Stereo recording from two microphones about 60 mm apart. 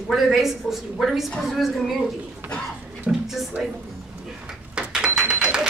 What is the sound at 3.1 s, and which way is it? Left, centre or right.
Speech, centre.